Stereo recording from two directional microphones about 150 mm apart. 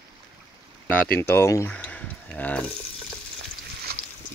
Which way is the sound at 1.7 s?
10° left (ahead or behind).